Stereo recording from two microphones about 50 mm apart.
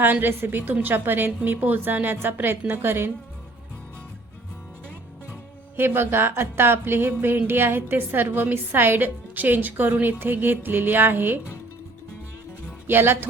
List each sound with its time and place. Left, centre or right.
0.0 s speech: right
5.7 s speech: right
12.9 s speech: right